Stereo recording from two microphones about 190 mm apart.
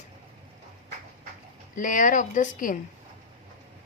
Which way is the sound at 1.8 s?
45° left (ahead or behind).